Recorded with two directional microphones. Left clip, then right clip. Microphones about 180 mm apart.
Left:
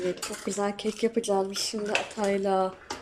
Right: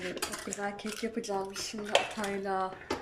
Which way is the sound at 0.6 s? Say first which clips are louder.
Left 9 dB; 25° left (ahead or behind).